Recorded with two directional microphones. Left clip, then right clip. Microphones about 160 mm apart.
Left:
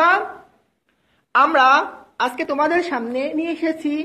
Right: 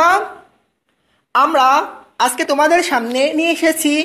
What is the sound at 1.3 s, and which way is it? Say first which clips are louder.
A woman's voice: right 2 dB; 35° right (ahead or behind).